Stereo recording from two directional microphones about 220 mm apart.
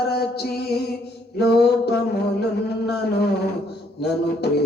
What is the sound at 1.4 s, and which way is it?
Music, 50° left (ahead or behind).